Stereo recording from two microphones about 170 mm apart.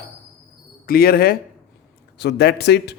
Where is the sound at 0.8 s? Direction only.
65° left (ahead or behind); by 3.0 s 80° left.